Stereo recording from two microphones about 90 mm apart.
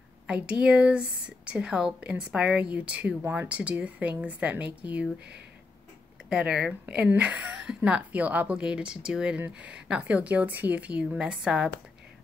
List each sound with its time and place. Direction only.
0.3 s a woman's voice: 10° right (ahead or behind)
6.2 s a woman's voice: 10° right (ahead or behind)